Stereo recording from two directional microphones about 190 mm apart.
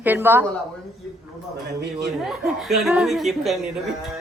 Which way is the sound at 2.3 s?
Centre (ahead or behind).